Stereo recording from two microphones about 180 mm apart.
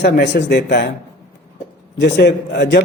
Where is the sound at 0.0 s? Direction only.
70° left (ahead or behind).